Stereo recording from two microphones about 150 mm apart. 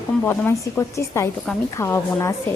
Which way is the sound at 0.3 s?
15° left (ahead or behind).